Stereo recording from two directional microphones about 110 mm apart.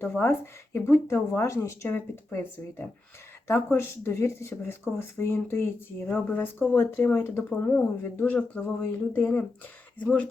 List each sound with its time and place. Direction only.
0.0 s speech: 20° left (ahead or behind)